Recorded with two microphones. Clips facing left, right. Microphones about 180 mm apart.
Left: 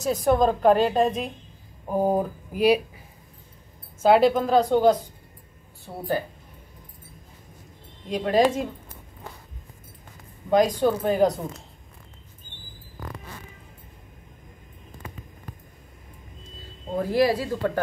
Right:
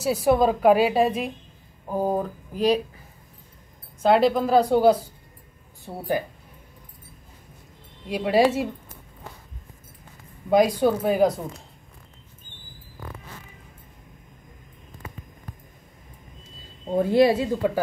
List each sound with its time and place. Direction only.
0.0 s a woman's voice: 5° right (ahead or behind)
1.9 s speech: 10° left (ahead or behind)
4.0 s a woman's voice: centre (ahead or behind)
8.1 s a woman's voice: 5° right (ahead or behind)
10.5 s a woman's voice: 10° right (ahead or behind)
16.9 s speech: 25° right (ahead or behind)